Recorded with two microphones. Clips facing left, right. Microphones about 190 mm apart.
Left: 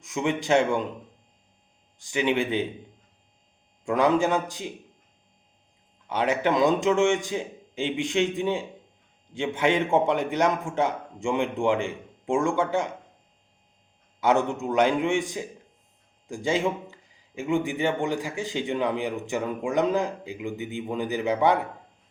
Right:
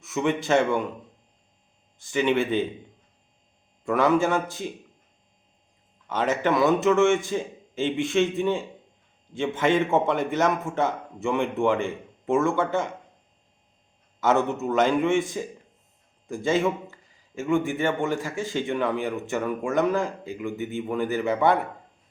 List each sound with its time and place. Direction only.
0.0 s a man's voice: 15° left (ahead or behind)
2.0 s a man's voice: 15° left (ahead or behind)
3.8 s a man's voice: 15° left (ahead or behind)
6.1 s a man's voice: 15° left (ahead or behind)
14.2 s a man's voice: 15° left (ahead or behind)